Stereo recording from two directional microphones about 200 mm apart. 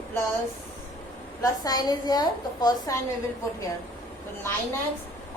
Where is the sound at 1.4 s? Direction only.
20° left (ahead or behind).